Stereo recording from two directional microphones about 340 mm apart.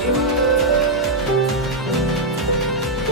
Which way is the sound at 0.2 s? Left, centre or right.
Centre.